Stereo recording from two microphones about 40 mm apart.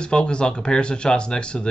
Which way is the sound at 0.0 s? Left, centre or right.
Left.